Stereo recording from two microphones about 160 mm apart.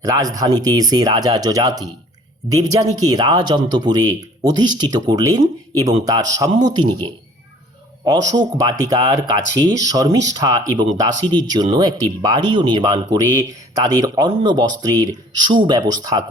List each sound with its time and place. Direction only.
0.0 s speech: 20° right (ahead or behind)